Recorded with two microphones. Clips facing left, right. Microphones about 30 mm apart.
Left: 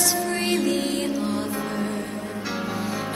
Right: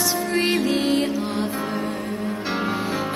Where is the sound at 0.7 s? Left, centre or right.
Right.